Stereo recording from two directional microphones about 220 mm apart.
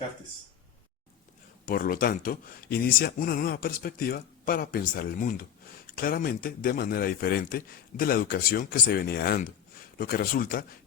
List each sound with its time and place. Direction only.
1.6 s a man's voice: 40° left (ahead or behind)